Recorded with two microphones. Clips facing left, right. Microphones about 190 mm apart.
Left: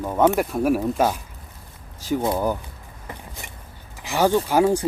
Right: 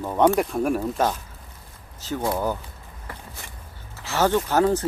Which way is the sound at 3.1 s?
20° left (ahead or behind).